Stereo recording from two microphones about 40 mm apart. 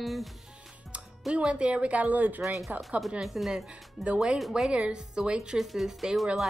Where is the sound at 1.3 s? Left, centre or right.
Right.